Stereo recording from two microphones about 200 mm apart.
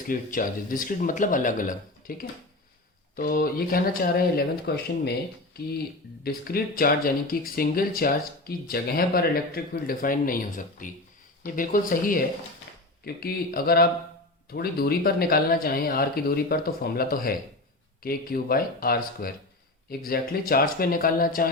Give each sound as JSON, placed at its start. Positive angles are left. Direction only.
{"t": 0.1, "sound": "speech", "side_deg": 45}